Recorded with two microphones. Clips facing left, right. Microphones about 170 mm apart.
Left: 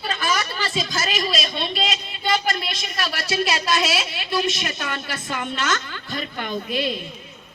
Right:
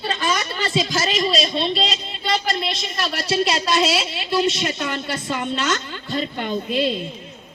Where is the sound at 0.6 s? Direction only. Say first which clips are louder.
Right 4 dB; 25° right (ahead or behind).